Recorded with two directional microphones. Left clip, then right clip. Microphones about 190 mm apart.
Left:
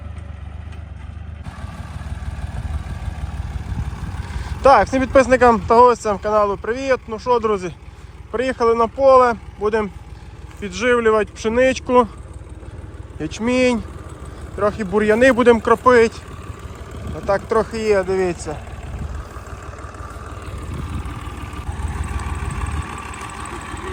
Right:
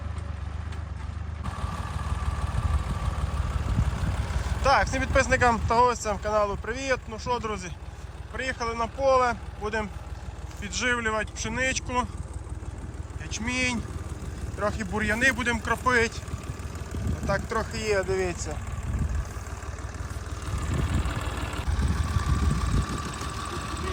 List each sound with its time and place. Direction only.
2.8 s speech: centre (ahead or behind)
13.2 s speech: 5° left (ahead or behind)
17.2 s speech: centre (ahead or behind)
19.5 s vehicle: 35° left (ahead or behind)
20.4 s vehicle: centre (ahead or behind)